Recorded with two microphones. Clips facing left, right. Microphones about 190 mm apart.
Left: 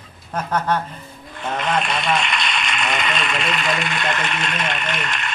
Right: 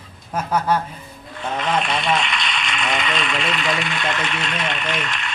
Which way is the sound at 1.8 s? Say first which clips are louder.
Even; 45° left (ahead or behind).